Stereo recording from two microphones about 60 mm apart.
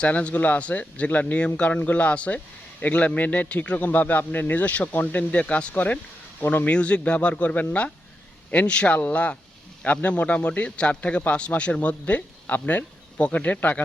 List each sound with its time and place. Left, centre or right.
0.0 s speech: centre
6.4 s speech: left
6.7 s speech: centre